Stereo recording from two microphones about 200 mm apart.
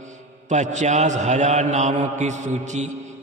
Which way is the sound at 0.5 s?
35° right (ahead or behind).